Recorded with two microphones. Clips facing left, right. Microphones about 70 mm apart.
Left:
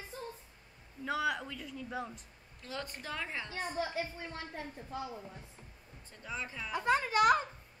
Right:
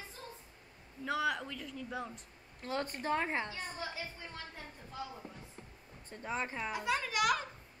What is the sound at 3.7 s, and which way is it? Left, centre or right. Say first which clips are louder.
Speech: left 6 dB; left.